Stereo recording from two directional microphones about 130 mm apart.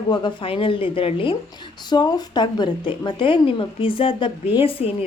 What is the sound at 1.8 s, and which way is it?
A woman's voice, 35° left (ahead or behind).